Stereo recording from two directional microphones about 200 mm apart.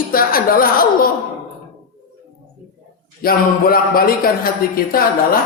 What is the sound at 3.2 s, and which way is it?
A woman's voice, 45° left (ahead or behind).